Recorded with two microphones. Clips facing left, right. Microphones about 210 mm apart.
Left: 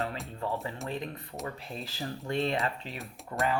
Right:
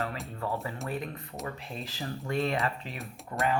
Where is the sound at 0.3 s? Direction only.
25° left (ahead or behind).